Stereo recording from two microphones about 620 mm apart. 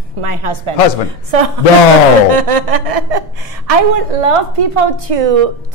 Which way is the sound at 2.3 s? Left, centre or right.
Right.